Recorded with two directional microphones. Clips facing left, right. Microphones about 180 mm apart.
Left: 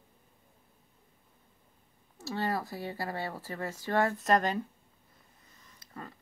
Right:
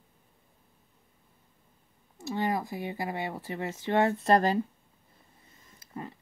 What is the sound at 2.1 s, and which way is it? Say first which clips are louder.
Speech: right 3 dB; 15° right (ahead or behind).